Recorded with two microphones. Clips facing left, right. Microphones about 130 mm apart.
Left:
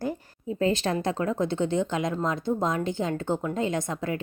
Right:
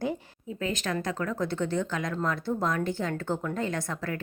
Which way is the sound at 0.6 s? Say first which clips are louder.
Left 6 dB; 30° left (ahead or behind).